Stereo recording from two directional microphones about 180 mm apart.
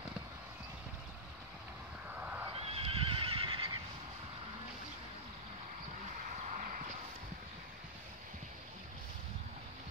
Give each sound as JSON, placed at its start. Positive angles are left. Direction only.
{"t": 2.1, "sound": "neigh", "side_deg": -10}
{"t": 2.5, "sound": "neigh", "side_deg": -35}
{"t": 6.3, "sound": "a sound", "side_deg": -40}